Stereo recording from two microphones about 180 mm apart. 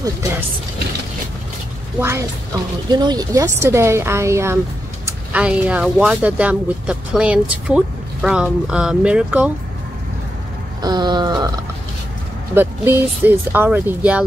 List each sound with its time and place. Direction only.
2.0 s speech: 15° right (ahead or behind)
10.8 s a sound: 25° right (ahead or behind)
12.5 s speech: 10° right (ahead or behind)